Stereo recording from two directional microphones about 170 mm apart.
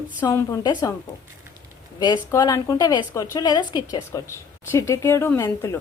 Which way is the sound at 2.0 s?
25° left (ahead or behind).